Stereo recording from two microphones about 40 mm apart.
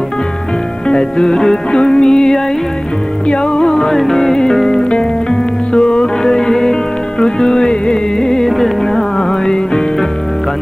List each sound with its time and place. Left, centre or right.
0.8 s music: centre